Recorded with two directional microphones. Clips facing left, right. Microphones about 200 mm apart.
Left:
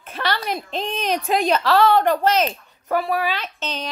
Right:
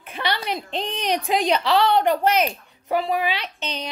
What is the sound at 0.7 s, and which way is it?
A woman's voice, 15° right (ahead or behind).